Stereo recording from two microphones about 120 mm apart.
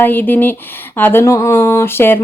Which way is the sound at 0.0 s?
15° left (ahead or behind).